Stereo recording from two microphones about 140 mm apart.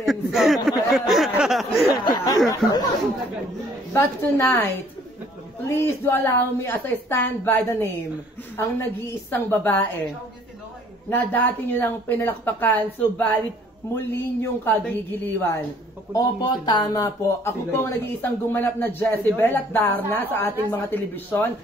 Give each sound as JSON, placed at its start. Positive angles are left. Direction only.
{"t": 0.0, "sound": "speech", "side_deg": 0}
{"t": 2.2, "sound": "speech", "side_deg": 25}
{"t": 3.9, "sound": "speech", "side_deg": 15}
{"t": 5.8, "sound": "speech", "side_deg": 15}
{"t": 11.1, "sound": "speech", "side_deg": 15}
{"t": 16.1, "sound": "speech", "side_deg": 30}